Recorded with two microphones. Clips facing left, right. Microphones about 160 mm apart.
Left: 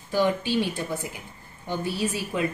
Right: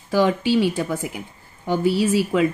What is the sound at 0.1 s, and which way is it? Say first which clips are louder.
A woman's voice: right 5 dB; 90° right.